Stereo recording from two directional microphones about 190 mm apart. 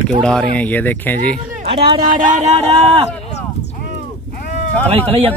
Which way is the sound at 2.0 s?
45° right (ahead or behind).